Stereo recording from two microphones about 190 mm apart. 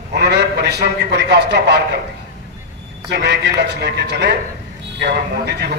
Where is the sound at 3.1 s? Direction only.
65° right (ahead or behind).